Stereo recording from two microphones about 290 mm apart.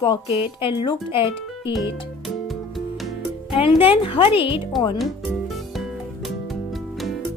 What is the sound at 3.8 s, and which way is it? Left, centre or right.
Speech, centre.